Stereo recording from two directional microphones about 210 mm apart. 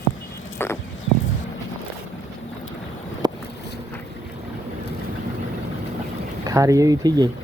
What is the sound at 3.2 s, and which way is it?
Boat, 20° right (ahead or behind).